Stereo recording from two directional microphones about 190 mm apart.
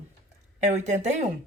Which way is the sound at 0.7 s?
35° right (ahead or behind).